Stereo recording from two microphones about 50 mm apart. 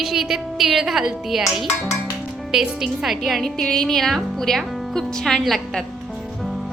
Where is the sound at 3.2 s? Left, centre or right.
Centre.